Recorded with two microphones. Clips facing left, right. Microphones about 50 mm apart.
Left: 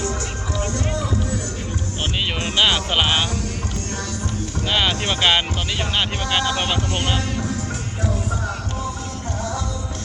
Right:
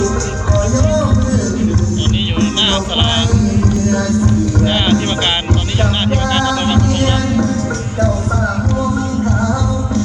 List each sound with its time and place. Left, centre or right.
0.9 s music: right
2.4 s music: centre
3.8 s music: right
4.6 s music: centre